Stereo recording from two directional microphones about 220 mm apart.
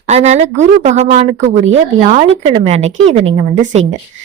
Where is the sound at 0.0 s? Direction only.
30° right (ahead or behind).